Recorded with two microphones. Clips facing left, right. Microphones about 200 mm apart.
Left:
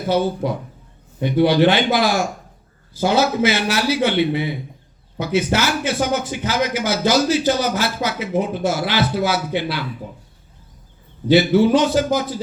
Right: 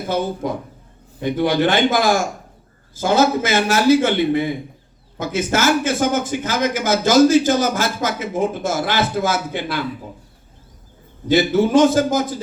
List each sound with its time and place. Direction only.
1.2 s a man's voice: 50° right (ahead or behind)
11.3 s a man's voice: 45° right (ahead or behind)